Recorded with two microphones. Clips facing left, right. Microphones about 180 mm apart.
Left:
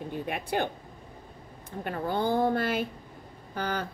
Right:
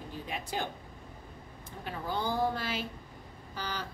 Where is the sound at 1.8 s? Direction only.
55° left (ahead or behind).